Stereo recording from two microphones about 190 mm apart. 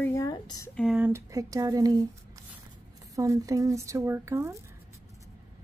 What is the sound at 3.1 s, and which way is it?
A woman's voice, 15° right (ahead or behind).